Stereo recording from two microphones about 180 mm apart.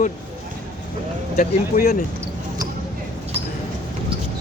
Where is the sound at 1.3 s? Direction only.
45° left (ahead or behind).